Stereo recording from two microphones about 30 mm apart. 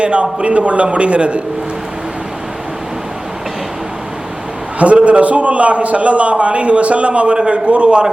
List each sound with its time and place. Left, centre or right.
0.0 s a man's voice: right
5.0 s a man's voice: right